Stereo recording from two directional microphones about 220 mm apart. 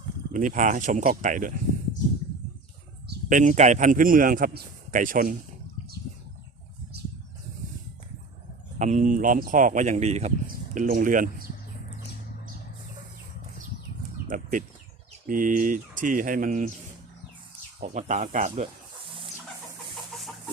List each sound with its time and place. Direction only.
0.3 s speech: 35° right (ahead or behind)
3.1 s speech: 35° right (ahead or behind)
8.8 s speech: 35° right (ahead or behind)
14.3 s bird: 35° right (ahead or behind)
15.3 s speech: 40° right (ahead or behind)
17.7 s speech: 35° right (ahead or behind)